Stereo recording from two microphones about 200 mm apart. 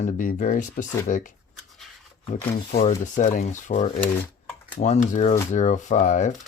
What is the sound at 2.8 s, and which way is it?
Speech, 40° left (ahead or behind).